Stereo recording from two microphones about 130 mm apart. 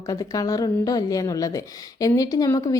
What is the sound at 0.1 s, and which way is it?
A woman's voice, 25° left (ahead or behind).